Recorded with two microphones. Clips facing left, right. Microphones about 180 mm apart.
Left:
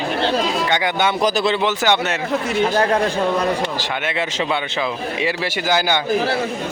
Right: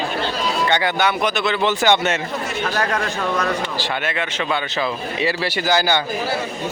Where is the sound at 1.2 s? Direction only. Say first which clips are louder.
Left 3 dB; 35° left (ahead or behind).